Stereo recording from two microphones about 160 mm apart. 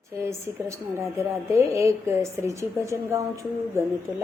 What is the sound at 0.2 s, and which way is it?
Speech, 15° right (ahead or behind).